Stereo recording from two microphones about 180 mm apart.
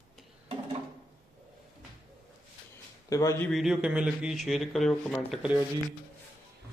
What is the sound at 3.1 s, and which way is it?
Speech, 20° left (ahead or behind).